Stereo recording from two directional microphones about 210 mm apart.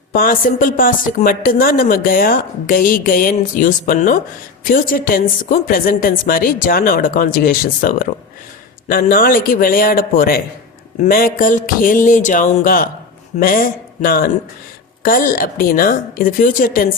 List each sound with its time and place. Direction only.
0.1 s a woman's voice: 45° left (ahead or behind)